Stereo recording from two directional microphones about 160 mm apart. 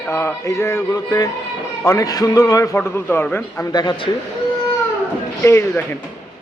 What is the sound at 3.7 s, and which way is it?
Speech, 25° left (ahead or behind).